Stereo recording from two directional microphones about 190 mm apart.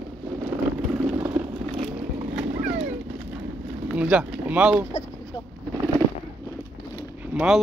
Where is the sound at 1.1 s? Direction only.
20° right (ahead or behind).